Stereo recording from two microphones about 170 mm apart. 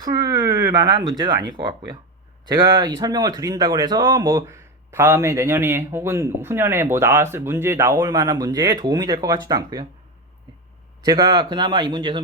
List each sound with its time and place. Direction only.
0.0 s speech: 25° right (ahead or behind)
11.0 s speech: 25° right (ahead or behind)